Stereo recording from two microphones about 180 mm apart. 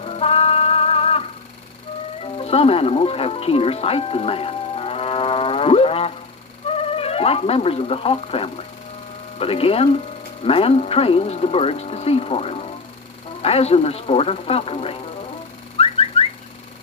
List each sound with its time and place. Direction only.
0.0 s music: 35° left (ahead or behind)
2.2 s speech: 35° left (ahead or behind)
15.8 s car alarm: 35° left (ahead or behind)